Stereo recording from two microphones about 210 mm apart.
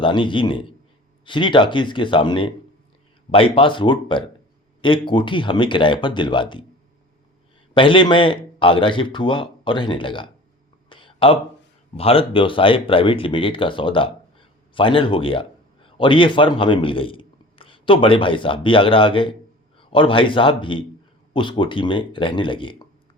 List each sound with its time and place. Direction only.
0.0 s a man's voice: 25° left (ahead or behind)
7.7 s a man's voice: 25° left (ahead or behind)
10.8 s a sound: 25° left (ahead or behind)
11.9 s a man's voice: 25° left (ahead or behind)